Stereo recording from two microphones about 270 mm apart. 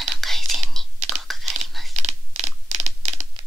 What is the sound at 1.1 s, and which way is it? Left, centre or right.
Crumpling, centre.